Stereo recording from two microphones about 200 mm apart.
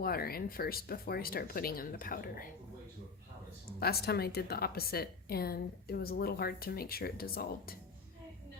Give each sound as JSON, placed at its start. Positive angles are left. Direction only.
{"t": 0.0, "sound": "a woman's voice", "side_deg": 50}
{"t": 3.7, "sound": "a woman's voice", "side_deg": 50}